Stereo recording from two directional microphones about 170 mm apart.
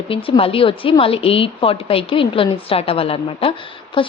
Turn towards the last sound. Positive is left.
turn(degrees=30)  # may be behind; listen again after turning